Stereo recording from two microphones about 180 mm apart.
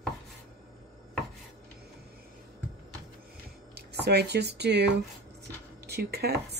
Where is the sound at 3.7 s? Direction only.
65° right (ahead or behind).